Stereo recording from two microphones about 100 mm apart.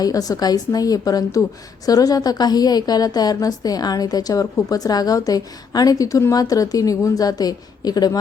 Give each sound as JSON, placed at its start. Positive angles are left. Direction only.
{"t": 0.0, "sound": "a woman's voice", "side_deg": 35}